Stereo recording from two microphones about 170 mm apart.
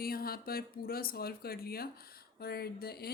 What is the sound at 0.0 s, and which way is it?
Speech, 60° left (ahead or behind).